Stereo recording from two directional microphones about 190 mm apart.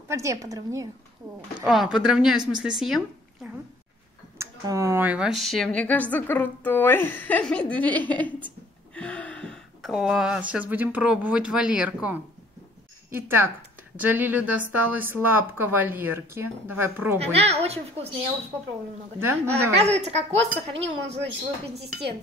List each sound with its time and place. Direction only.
0.1 s speech: 15° right (ahead or behind)
1.7 s a woman's voice: centre (ahead or behind)
4.4 s speech: 15° right (ahead or behind)
17.2 s a woman's voice: 30° right (ahead or behind)
19.1 s speech: 15° right (ahead or behind)
19.8 s a woman's voice: 35° right (ahead or behind)
20.7 s speech: 70° right (ahead or behind)